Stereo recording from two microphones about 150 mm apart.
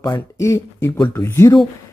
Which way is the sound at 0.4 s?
20° left (ahead or behind).